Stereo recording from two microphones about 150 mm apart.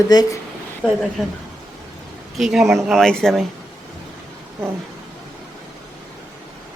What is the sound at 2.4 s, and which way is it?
Speech, centre (ahead or behind).